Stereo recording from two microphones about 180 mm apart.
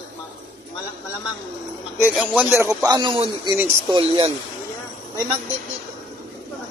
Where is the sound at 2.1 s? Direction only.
5° right (ahead or behind); by 4.3 s 25° right (ahead or behind).